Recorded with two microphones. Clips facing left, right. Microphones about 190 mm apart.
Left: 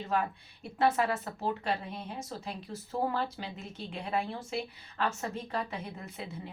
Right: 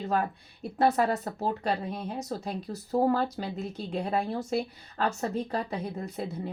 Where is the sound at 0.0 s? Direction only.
40° right (ahead or behind).